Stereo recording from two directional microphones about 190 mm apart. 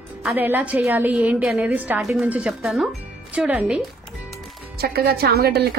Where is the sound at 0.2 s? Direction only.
5° right (ahead or behind).